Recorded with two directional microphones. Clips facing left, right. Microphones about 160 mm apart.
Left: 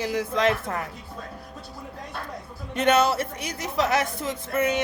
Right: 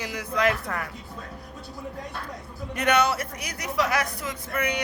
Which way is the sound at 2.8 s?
25° left (ahead or behind).